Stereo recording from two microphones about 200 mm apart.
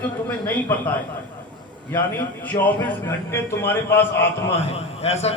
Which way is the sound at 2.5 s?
30° left (ahead or behind).